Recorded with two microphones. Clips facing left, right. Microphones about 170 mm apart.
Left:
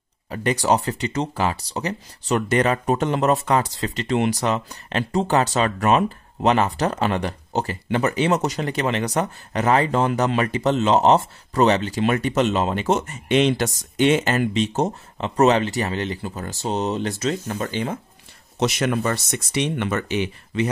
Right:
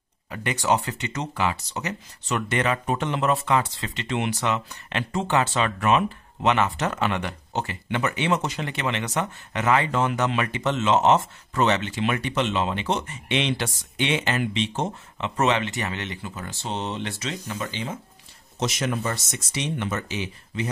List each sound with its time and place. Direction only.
0.3 s speech: 35° left (ahead or behind)
18.6 s speech: 65° left (ahead or behind)